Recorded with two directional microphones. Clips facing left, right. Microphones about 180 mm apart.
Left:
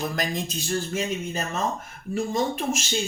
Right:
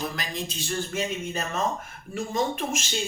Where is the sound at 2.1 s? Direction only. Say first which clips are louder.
Left 2 dB; 35° left (ahead or behind).